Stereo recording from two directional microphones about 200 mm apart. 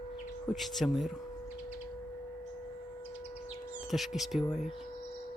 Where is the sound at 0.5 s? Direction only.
Centre (ahead or behind).